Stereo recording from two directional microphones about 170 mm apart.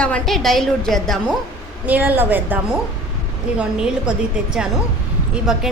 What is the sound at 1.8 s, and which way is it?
Speech, 10° right (ahead or behind).